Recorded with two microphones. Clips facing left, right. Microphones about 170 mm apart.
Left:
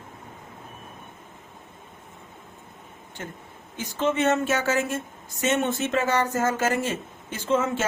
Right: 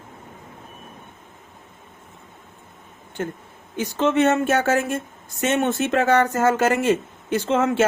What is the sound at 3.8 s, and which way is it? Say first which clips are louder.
Speech: right 5 dB; 70° right (ahead or behind).